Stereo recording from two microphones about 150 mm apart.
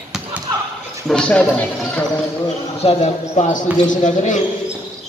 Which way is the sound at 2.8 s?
45° left (ahead or behind).